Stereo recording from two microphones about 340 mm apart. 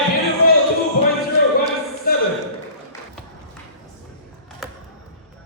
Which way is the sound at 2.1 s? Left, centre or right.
Left.